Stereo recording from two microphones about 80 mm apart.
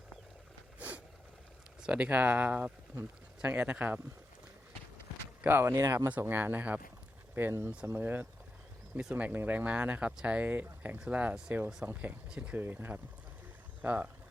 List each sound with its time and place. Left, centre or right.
0.8 s a sound: centre
1.8 s speech: centre
5.4 s speech: right
6.1 s speech: right
9.0 s speech: centre
12.3 s speech: centre
12.5 s speech: right